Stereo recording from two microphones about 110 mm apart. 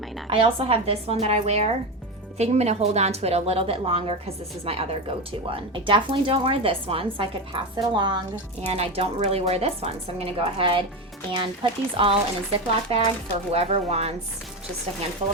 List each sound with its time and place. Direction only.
0.3 s speech: 55° right (ahead or behind); by 1.7 s 75° right (ahead or behind)
2.4 s a woman's voice: 85° right; by 7.3 s 60° right (ahead or behind)
7.8 s speech: 45° right (ahead or behind)
8.7 s speech: 65° right (ahead or behind)
12.9 s a woman's voice: 65° right (ahead or behind)